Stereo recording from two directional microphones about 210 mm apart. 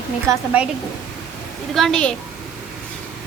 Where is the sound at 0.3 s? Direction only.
5° right (ahead or behind).